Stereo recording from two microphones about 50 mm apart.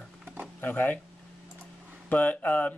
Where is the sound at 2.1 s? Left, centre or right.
Left.